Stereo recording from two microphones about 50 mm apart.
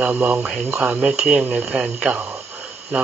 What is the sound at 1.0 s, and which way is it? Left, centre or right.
Speech, centre.